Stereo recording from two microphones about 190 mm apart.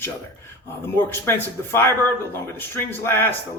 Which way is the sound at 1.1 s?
15° left (ahead or behind).